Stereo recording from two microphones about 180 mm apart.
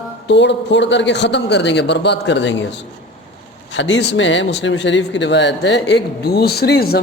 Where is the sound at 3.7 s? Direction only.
90° left.